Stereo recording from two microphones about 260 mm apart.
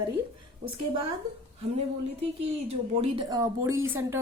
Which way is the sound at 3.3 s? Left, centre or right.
Centre.